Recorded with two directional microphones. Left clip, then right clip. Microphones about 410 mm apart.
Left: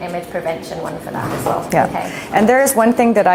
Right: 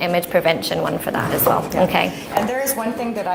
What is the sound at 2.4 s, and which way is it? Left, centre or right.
Speech, left.